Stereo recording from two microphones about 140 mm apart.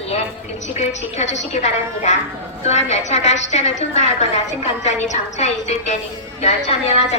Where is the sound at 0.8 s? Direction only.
55° left (ahead or behind).